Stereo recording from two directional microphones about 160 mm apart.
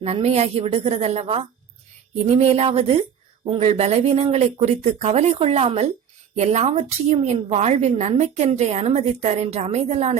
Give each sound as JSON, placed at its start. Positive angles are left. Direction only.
{"t": 0.0, "sound": "a woman's voice", "side_deg": -40}